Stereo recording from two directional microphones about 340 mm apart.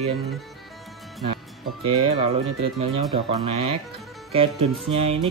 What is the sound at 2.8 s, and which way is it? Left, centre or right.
Speech, centre.